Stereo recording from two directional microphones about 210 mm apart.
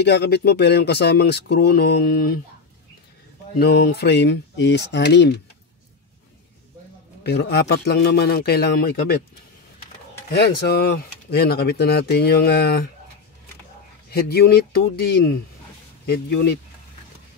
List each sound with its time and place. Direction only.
0.0 s speech: 50° left (ahead or behind)
3.5 s speech: 50° left (ahead or behind)
7.2 s speech: 50° left (ahead or behind)
10.3 s speech: 50° left (ahead or behind)
14.1 s speech: 50° left (ahead or behind)